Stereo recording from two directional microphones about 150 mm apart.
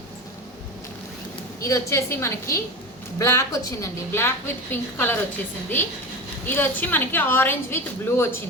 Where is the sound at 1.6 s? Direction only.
20° left (ahead or behind).